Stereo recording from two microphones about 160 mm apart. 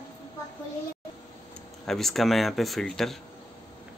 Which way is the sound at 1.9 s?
Centre (ahead or behind).